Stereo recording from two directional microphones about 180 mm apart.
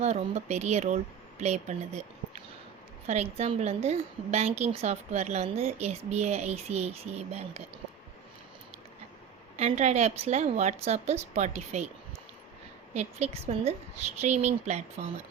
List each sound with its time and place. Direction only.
0.0 s a woman's voice: 40° right (ahead or behind)
9.6 s a woman's voice: 40° right (ahead or behind)
12.9 s a woman's voice: 40° right (ahead or behind)